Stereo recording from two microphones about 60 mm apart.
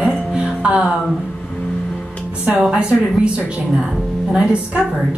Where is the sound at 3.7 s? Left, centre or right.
Centre.